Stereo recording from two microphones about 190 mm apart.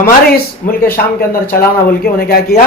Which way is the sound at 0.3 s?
50° left (ahead or behind).